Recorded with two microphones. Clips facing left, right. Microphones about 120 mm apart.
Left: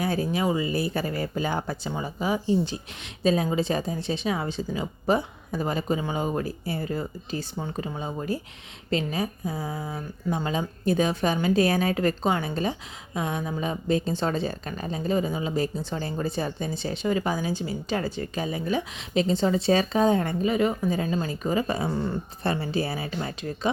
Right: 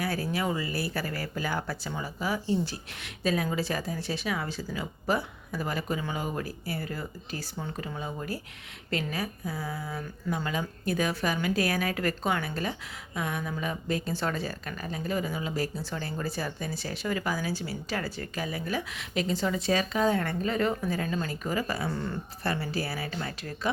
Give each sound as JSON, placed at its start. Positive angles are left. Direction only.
{"t": 0.0, "sound": "a woman's voice", "side_deg": 20}